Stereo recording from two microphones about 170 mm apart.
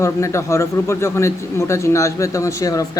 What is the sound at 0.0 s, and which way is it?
Speech, 15° left (ahead or behind).